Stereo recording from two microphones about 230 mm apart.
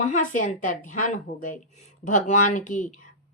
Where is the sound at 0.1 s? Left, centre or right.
Left.